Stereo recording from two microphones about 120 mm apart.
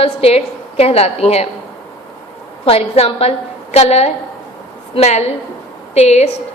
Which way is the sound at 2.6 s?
55° left (ahead or behind).